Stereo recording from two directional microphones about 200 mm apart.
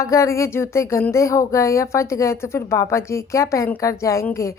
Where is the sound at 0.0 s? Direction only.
15° left (ahead or behind).